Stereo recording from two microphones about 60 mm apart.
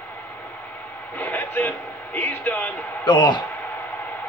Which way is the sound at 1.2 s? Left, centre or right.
Left.